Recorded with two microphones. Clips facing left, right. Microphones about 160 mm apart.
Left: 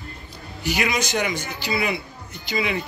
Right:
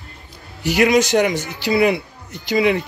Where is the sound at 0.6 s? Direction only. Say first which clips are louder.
Right 9 dB; 75° right (ahead or behind).